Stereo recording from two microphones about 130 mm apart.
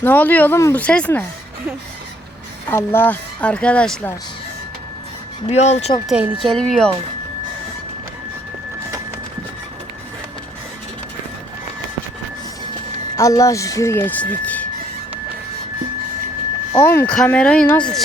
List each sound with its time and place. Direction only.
0.0 s speech: 15° left (ahead or behind)
2.6 s speech: 15° left (ahead or behind)
5.5 s speech: 55° left (ahead or behind)
6.1 s a woman's voice: 10° right (ahead or behind)
6.4 s speech: 5° left (ahead or behind)
13.1 s speech: 25° left (ahead or behind)
16.8 s speech: 15° left (ahead or behind)